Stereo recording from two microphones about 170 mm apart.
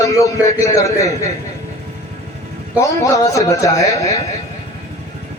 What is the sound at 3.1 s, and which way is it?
A man's voice, 20° left (ahead or behind).